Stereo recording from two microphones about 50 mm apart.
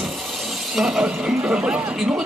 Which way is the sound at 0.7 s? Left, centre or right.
Centre.